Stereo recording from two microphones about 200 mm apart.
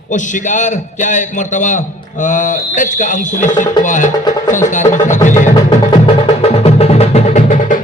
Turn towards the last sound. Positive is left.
turn(degrees=40)  # may be behind; listen again after turning